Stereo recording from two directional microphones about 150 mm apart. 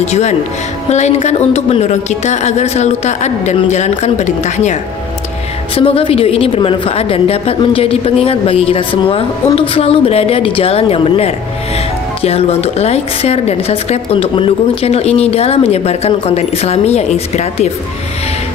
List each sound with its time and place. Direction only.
0.0 s a woman's voice: 50° left (ahead or behind)
5.8 s a woman's voice: 40° left (ahead or behind)